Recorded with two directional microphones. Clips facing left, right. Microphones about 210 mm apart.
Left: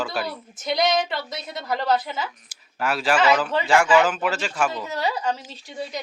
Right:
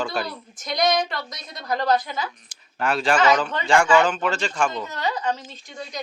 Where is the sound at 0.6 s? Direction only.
25° left (ahead or behind).